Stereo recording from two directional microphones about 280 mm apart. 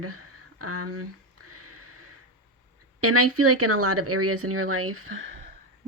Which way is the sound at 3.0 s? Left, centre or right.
Right.